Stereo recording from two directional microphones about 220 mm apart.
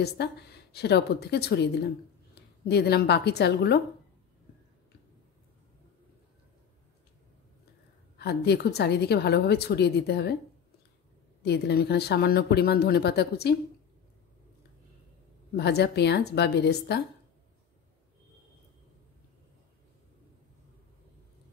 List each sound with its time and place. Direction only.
0.2 s speech: 50° left (ahead or behind)
8.2 s speech: 45° left (ahead or behind)
11.4 s speech: 50° left (ahead or behind)
15.5 s speech: 45° left (ahead or behind)